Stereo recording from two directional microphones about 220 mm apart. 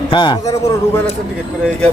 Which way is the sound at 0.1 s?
20° left (ahead or behind).